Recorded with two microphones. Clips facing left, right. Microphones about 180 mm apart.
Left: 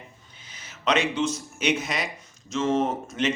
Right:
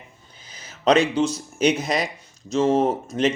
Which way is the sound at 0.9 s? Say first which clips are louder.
Right 6 dB; 35° right (ahead or behind).